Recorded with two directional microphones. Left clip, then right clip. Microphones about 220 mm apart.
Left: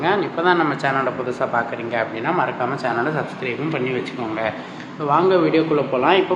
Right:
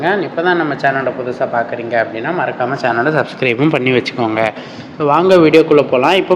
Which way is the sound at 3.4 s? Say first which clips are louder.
Right 10 dB; 40° right (ahead or behind).